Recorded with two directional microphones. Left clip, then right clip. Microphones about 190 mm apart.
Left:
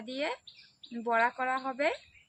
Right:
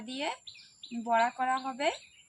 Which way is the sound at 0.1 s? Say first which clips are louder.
Left 1 dB; 10° left (ahead or behind).